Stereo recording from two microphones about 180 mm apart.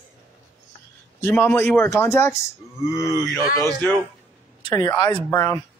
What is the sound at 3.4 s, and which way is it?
Speech, 20° right (ahead or behind).